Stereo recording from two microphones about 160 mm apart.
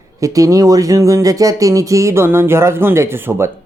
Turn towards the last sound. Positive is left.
turn(degrees=-15)  # may be behind; listen again after turning